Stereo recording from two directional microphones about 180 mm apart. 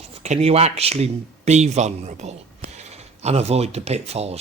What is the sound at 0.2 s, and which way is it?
Speech, 35° right (ahead or behind).